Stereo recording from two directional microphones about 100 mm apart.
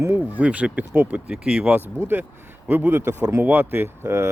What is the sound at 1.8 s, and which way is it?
Speech, 20° right (ahead or behind).